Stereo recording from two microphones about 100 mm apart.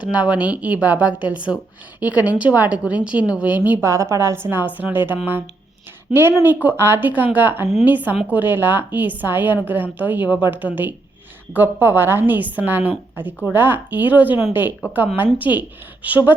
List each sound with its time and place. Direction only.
0.0 s a woman's voice: 10° right (ahead or behind)
3.8 s a woman's voice: 30° right (ahead or behind)